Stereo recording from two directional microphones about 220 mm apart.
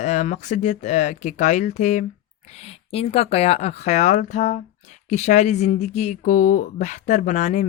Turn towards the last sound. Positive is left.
turn(degrees=35)  # may be behind; listen again after turning